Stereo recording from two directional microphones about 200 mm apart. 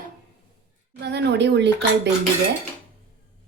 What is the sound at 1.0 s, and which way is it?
Speech, 55° right (ahead or behind).